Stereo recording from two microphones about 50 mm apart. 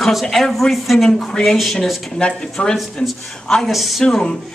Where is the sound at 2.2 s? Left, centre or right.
Left.